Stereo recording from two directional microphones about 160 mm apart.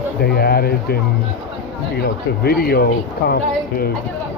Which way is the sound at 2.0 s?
75° left (ahead or behind).